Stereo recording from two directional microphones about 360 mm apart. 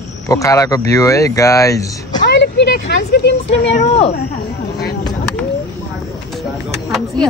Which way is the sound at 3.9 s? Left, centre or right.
Centre.